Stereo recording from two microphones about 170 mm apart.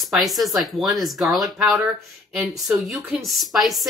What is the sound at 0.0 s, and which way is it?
Speech, centre (ahead or behind).